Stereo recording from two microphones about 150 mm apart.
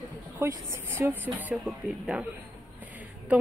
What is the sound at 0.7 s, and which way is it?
Speech, 15° right (ahead or behind).